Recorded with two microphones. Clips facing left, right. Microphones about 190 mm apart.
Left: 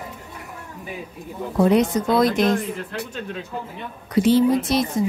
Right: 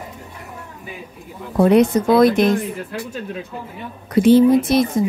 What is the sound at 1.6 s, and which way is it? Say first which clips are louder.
Speech: right 4 dB; 60° right (ahead or behind).